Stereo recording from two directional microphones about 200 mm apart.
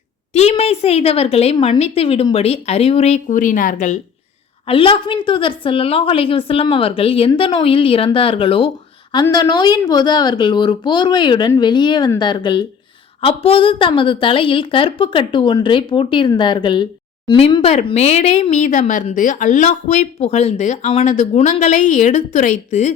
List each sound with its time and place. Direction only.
0.3 s a woman's voice: 30° left (ahead or behind)
4.6 s a woman's voice: 25° left (ahead or behind)